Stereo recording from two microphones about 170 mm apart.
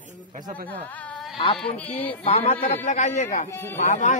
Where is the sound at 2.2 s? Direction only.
35° left (ahead or behind).